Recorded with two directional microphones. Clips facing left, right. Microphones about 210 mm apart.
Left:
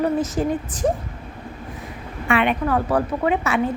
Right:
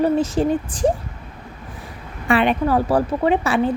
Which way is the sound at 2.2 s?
35° right (ahead or behind).